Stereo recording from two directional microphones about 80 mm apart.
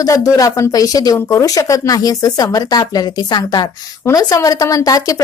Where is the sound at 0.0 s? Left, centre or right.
Left.